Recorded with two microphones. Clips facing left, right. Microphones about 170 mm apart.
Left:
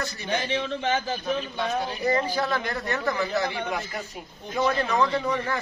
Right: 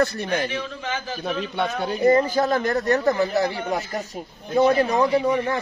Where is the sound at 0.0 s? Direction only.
55° right (ahead or behind).